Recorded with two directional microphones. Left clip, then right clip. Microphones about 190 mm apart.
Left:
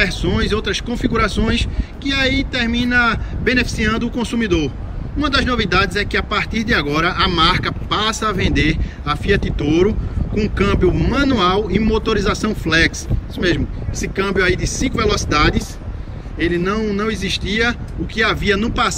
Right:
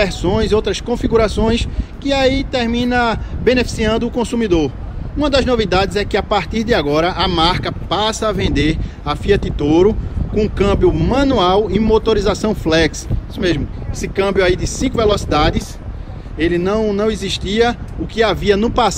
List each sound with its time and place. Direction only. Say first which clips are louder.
0.0 s speech: right 2 dB; 10° right (ahead or behind)